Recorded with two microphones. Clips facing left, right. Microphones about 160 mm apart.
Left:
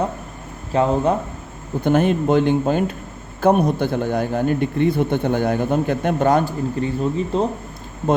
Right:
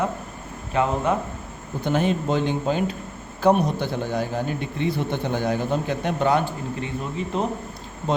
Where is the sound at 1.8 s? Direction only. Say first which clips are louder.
Left 5 dB; 50° left (ahead or behind); by 7.5 s 35° left (ahead or behind).